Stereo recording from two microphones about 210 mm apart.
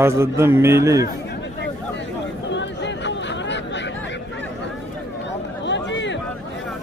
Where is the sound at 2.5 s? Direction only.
55° left (ahead or behind).